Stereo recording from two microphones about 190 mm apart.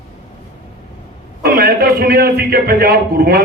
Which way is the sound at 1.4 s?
50° right (ahead or behind).